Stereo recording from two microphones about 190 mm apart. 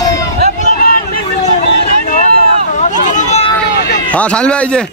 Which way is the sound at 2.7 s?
40° left (ahead or behind).